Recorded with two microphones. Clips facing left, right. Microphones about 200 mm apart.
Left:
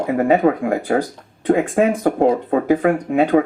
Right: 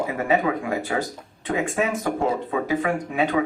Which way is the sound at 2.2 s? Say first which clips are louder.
Left 9 dB; 50° left (ahead or behind).